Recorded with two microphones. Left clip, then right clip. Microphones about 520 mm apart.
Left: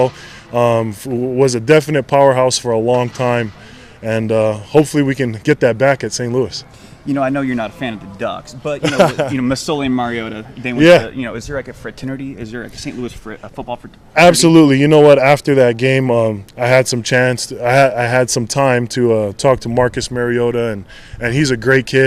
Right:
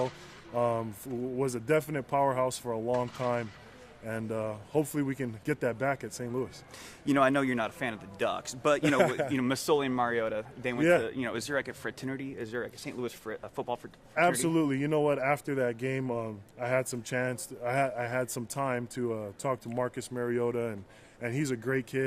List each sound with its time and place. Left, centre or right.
0.5 s speech: left
7.1 s speech: centre
8.8 s speech: left
9.3 s speech: centre
9.6 s speech: centre
10.8 s speech: left
11.0 s speech: centre
12.1 s speech: centre
13.2 s speech: centre
14.1 s speech: left